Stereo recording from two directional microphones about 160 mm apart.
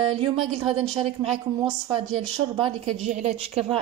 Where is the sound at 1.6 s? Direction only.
30° right (ahead or behind).